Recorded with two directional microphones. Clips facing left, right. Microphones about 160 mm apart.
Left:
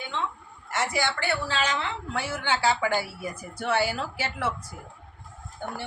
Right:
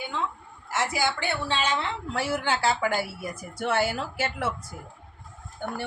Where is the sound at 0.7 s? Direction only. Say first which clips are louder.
Right 1 dB; 5° right (ahead or behind).